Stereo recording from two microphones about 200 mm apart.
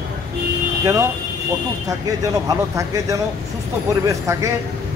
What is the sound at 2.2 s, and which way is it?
Speech, 15° right (ahead or behind).